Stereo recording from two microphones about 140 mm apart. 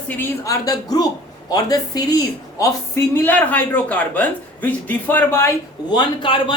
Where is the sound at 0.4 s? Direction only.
25° left (ahead or behind).